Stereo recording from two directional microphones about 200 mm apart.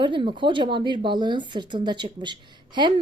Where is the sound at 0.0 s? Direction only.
25° right (ahead or behind).